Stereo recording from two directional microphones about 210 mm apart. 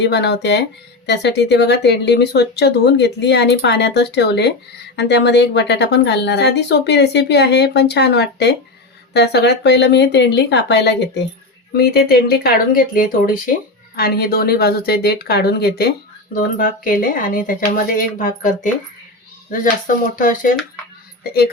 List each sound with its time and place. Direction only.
0.0 s speech: 55° left (ahead or behind)